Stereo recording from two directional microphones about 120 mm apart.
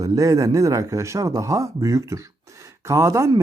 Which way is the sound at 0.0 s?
30° right (ahead or behind).